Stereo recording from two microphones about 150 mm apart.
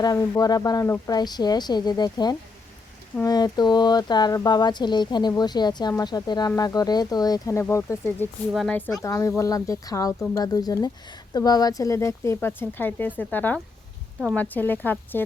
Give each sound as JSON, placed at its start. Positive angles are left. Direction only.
{"t": 0.0, "sound": "speech", "side_deg": 25}
{"t": 8.5, "sound": "speech", "side_deg": 5}
{"t": 9.0, "sound": "speech", "side_deg": 20}